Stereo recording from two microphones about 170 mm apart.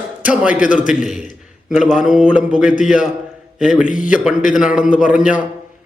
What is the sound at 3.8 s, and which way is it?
Speech, 50° left (ahead or behind).